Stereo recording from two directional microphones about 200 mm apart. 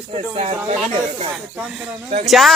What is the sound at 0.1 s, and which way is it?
Speech, 30° right (ahead or behind).